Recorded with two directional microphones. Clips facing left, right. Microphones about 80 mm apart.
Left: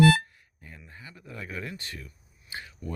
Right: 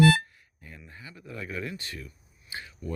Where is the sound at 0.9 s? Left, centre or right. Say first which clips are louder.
Right 2 dB; left.